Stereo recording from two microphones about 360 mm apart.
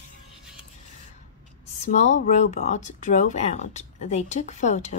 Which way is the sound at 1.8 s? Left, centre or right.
Centre.